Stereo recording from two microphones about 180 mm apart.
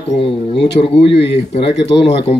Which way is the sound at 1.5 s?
35° left (ahead or behind).